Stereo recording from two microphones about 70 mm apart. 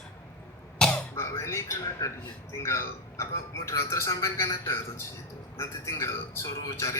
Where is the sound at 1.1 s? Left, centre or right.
Left.